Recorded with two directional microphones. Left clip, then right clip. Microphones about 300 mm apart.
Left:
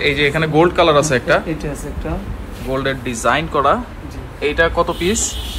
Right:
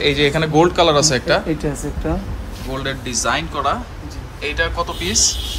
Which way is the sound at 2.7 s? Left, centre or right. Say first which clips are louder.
Left 4 dB; centre.